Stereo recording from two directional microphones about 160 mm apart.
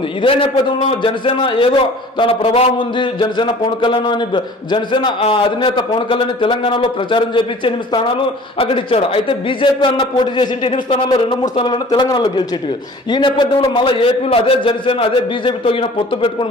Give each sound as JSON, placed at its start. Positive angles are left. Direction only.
{"t": 0.2, "sound": "a man's voice", "side_deg": 35}